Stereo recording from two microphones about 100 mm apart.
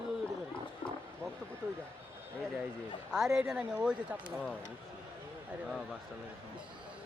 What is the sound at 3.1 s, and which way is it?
Speech, 5° right (ahead or behind).